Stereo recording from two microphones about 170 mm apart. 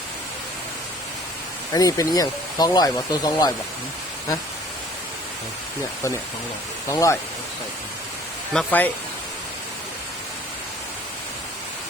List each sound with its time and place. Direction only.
1.7 s speech: 20° left (ahead or behind)
6.8 s speech: 15° left (ahead or behind)
8.5 s speech: 10° left (ahead or behind)